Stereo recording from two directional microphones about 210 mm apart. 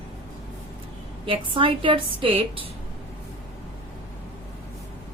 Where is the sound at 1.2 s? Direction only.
25° right (ahead or behind).